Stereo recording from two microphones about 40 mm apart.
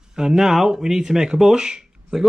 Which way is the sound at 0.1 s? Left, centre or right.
Centre.